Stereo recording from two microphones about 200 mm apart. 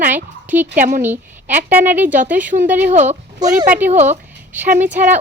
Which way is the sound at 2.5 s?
35° right (ahead or behind).